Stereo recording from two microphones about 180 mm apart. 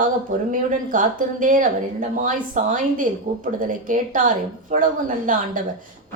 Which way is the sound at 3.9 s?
45° right (ahead or behind).